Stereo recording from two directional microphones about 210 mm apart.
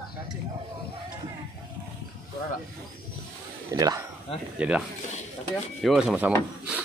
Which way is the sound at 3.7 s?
15° right (ahead or behind).